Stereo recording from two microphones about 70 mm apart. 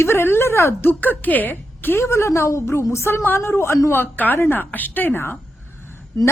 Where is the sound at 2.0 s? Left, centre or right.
Left.